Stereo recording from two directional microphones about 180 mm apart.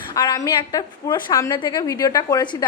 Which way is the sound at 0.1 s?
20° left (ahead or behind).